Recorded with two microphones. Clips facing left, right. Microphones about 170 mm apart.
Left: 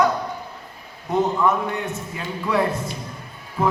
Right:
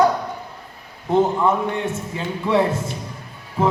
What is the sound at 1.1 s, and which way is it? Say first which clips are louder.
A man's voice: right 2 dB; 30° right (ahead or behind).